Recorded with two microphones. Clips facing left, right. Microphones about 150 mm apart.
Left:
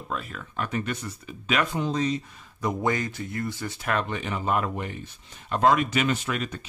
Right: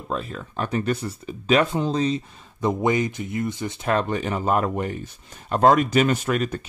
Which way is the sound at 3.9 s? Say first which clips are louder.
Right 5 dB; 40° right (ahead or behind).